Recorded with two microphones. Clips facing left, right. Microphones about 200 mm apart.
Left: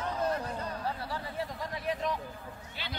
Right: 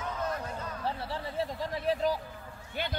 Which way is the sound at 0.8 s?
25° right (ahead or behind).